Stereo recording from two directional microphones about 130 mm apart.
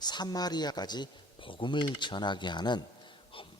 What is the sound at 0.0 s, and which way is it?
A man's voice, 30° left (ahead or behind).